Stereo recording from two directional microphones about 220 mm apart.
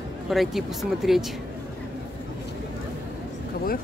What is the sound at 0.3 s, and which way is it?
Speech, centre (ahead or behind).